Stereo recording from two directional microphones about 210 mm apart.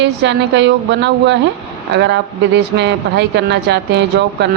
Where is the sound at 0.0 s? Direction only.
55° right (ahead or behind).